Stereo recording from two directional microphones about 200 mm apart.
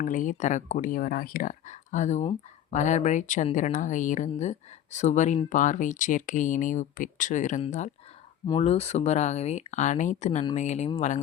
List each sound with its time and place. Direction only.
0.0 s speech: 40° left (ahead or behind)